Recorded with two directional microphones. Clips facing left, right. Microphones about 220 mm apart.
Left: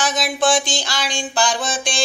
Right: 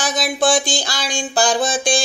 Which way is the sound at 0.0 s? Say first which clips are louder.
Right 1 dB; 35° right (ahead or behind).